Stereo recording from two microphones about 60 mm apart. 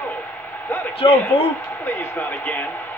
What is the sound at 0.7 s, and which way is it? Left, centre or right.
Speech, left.